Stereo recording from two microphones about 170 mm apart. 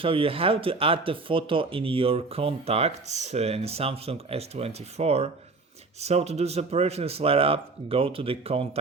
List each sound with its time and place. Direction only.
0.0 s speech: 30° right (ahead or behind)